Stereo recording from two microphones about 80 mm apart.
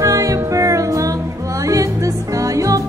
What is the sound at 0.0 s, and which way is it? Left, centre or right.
Music, right.